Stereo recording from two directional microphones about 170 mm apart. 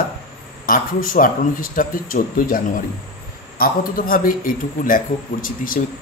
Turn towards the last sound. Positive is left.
turn(degrees=55)  # may be behind; listen again after turning